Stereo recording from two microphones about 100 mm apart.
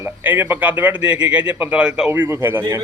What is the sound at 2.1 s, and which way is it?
Speech, 20° right (ahead or behind).